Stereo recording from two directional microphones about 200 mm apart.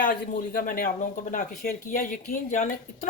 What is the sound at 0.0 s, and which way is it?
Speech, 45° left (ahead or behind).